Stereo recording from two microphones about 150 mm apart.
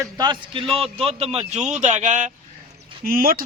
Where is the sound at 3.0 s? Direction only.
75° right (ahead or behind).